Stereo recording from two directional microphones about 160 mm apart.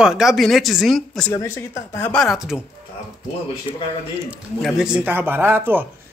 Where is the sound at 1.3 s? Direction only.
20° left (ahead or behind); by 2.6 s centre (ahead or behind).